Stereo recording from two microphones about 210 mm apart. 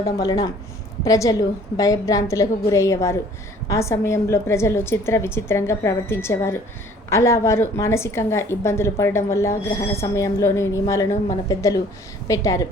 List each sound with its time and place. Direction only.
0.0 s a woman's voice: 15° left (ahead or behind)